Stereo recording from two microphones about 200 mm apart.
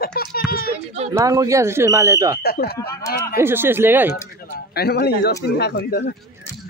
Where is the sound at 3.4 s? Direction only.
10° right (ahead or behind).